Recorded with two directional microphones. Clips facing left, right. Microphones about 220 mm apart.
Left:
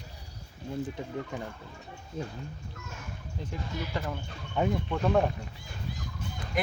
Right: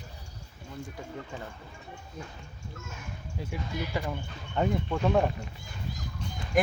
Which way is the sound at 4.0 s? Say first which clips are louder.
Right 1 dB; 10° right (ahead or behind).